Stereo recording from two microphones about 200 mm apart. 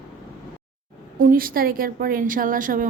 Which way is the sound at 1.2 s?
45° right (ahead or behind).